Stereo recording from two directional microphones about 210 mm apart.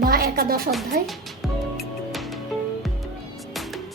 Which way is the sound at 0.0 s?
45° right (ahead or behind).